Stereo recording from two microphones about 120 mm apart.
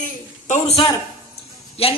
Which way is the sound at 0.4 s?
90° left.